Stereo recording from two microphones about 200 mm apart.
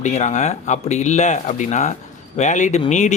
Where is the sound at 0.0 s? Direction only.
35° left (ahead or behind).